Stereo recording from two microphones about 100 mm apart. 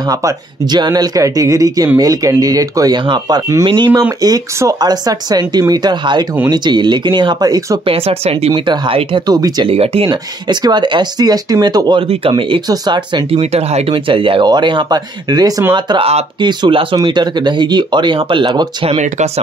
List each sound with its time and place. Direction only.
0.1 s speech: 40° right (ahead or behind)
4.2 s speech: 35° right (ahead or behind)
7.8 s speech: 75° right (ahead or behind)
8.6 s speech: 55° right (ahead or behind)
9.3 s speech: 40° right (ahead or behind)
9.7 s speech: 75° right (ahead or behind)
10.0 s speech: 45° right (ahead or behind)
12.3 s speech: 55° right (ahead or behind)
13.3 s speech: 85° right; by 15.5 s 45° right (ahead or behind)
16.0 s speech: 90° right
16.3 s speech: 50° right (ahead or behind)